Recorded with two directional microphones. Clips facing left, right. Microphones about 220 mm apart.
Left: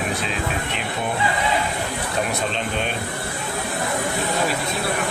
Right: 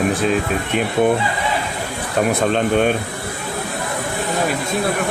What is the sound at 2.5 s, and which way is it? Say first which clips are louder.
Speech: right 10 dB; 50° right (ahead or behind).